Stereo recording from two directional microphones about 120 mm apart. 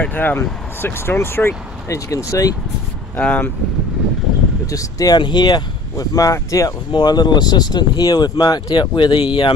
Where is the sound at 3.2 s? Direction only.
15° left (ahead or behind).